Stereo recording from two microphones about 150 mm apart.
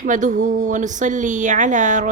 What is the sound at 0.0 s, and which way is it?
Speech, 55° right (ahead or behind).